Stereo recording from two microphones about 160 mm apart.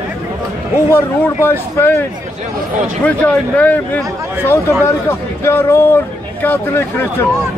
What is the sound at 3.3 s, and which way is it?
Speech, 10° left (ahead or behind).